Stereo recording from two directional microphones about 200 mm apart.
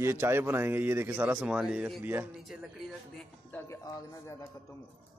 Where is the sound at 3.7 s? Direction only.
20° left (ahead or behind).